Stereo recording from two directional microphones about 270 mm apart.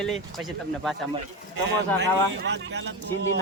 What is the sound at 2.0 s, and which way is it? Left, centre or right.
Speech, right.